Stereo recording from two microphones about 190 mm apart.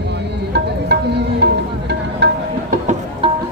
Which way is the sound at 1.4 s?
60° right (ahead or behind).